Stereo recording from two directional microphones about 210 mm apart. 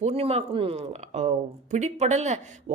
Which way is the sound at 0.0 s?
30° right (ahead or behind).